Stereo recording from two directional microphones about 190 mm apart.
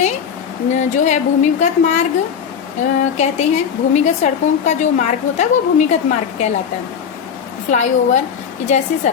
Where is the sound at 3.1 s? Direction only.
35° left (ahead or behind).